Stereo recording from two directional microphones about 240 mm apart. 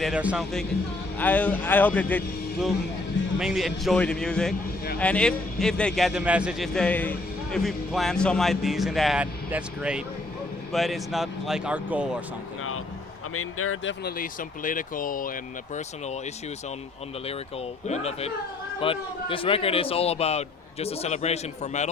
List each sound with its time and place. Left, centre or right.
0.0 s a man's voice: centre
1.2 s a man's voice: centre
13.3 s speech: left
14.0 s speech: left
17.8 s a man's voice: left